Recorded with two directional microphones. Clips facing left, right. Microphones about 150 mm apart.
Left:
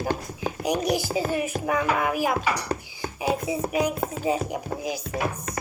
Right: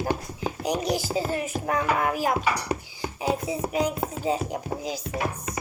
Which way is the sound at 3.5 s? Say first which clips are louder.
Left 1 dB; 15° left (ahead or behind).